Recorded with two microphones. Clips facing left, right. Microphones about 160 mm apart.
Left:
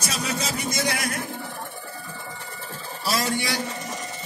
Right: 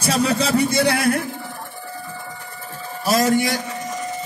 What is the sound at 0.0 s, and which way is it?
A man's voice, 60° right (ahead or behind).